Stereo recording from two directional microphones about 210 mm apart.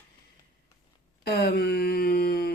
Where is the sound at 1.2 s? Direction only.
50° left (ahead or behind).